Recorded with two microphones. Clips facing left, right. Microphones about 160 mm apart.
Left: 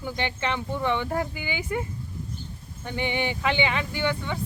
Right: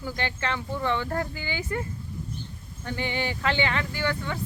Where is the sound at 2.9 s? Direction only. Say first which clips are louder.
Left 2 dB; 20° left (ahead or behind).